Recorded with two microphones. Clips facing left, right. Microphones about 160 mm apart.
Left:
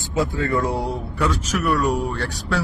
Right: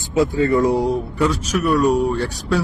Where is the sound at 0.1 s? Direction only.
20° right (ahead or behind).